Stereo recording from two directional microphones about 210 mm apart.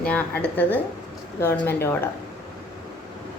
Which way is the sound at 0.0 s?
5° left (ahead or behind).